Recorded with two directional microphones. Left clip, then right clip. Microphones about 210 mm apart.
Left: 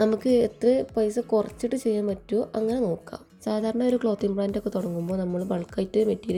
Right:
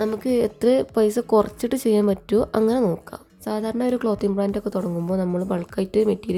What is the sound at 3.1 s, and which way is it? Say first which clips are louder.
A woman's voice: right 1 dB; 5° right (ahead or behind).